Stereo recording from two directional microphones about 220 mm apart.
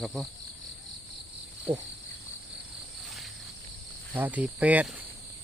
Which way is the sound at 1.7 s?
20° right (ahead or behind).